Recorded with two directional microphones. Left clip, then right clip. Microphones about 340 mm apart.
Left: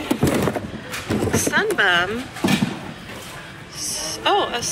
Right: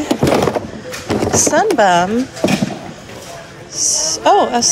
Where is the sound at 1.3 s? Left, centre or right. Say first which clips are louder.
Right 8 dB; centre.